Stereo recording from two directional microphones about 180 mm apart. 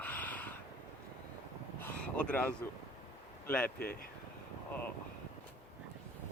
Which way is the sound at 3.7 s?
55° left (ahead or behind).